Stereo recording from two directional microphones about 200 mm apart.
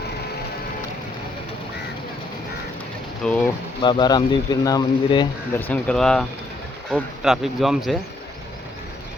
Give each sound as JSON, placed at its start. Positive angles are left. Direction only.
{"t": 3.2, "sound": "speech", "side_deg": 5}
{"t": 3.8, "sound": "speech", "side_deg": 20}
{"t": 5.5, "sound": "speech", "side_deg": 10}